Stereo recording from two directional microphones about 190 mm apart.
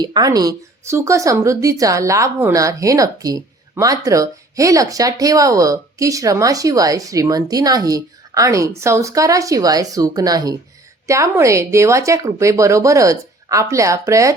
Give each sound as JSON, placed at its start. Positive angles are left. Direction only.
{"t": 0.0, "sound": "speech", "side_deg": -20}